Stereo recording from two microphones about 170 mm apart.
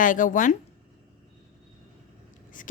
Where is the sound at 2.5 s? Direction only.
50° left (ahead or behind).